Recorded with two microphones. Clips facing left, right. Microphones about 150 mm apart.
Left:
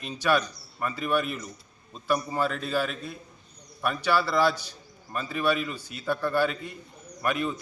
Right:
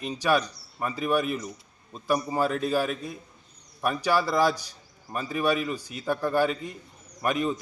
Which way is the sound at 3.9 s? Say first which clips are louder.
Right 1 dB; 40° right (ahead or behind).